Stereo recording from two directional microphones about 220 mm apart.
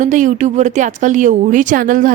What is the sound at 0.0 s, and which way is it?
Speech, 35° right (ahead or behind).